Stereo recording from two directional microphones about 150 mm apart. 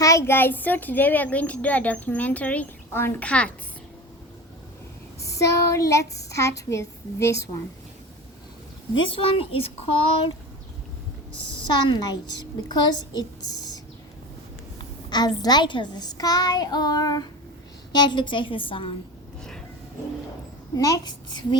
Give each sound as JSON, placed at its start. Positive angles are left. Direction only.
{"t": 0.0, "sound": "a child's voice", "side_deg": 20}
{"t": 5.2, "sound": "speech", "side_deg": 20}
{"t": 9.1, "sound": "a woman's voice", "side_deg": 40}
{"t": 11.9, "sound": "speech", "side_deg": 25}
{"t": 15.1, "sound": "a woman's voice", "side_deg": 30}
{"t": 20.7, "sound": "speech", "side_deg": 25}